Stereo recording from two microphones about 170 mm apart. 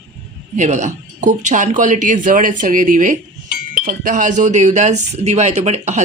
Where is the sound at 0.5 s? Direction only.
45° right (ahead or behind).